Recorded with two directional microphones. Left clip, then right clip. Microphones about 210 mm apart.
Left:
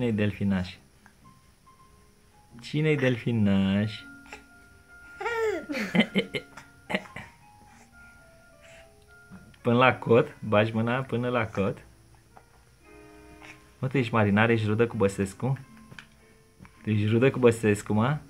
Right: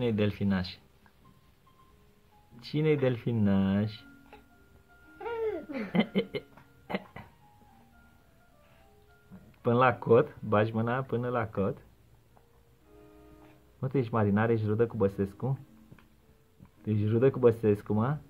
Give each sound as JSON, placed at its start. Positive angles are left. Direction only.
{"t": 0.0, "sound": "speech", "side_deg": -5}
{"t": 2.6, "sound": "speech", "side_deg": -5}
{"t": 5.2, "sound": "babbling", "side_deg": 10}
{"t": 5.9, "sound": "speech", "side_deg": -5}
{"t": 9.5, "sound": "speech", "side_deg": 0}
{"t": 13.7, "sound": "speech", "side_deg": 0}
{"t": 16.8, "sound": "speech", "side_deg": 0}